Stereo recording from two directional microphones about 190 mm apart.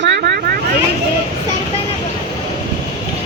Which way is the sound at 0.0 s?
60° right (ahead or behind).